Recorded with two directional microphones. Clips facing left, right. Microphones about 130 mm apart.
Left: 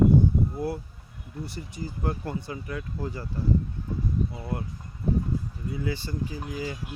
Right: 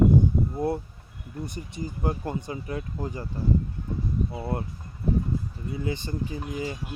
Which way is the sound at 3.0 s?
15° right (ahead or behind).